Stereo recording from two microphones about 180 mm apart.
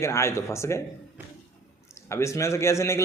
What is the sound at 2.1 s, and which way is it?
Speech, 15° left (ahead or behind).